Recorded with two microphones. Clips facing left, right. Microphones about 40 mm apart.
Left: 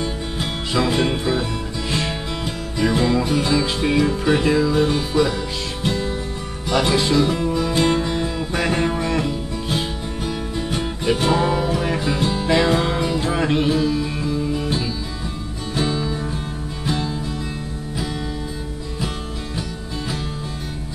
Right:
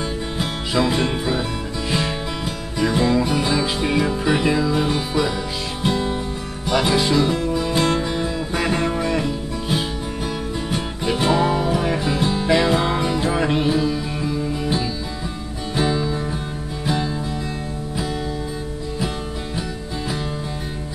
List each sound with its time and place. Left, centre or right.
0.0 s music: centre
5.9 s music: centre
6.7 s music: centre